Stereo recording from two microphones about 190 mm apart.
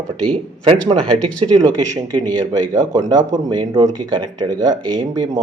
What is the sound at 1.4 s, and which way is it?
Speech, 20° right (ahead or behind).